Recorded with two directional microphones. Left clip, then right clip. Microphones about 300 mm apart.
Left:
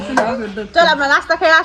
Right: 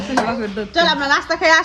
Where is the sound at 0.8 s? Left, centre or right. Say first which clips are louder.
Left 3 dB; centre.